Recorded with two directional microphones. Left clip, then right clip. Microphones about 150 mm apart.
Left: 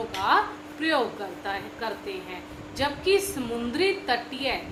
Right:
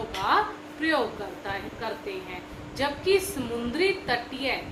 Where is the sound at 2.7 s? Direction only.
50° left (ahead or behind).